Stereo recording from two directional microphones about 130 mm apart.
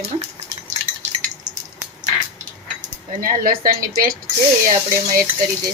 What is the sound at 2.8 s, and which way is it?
Speech, 90° right.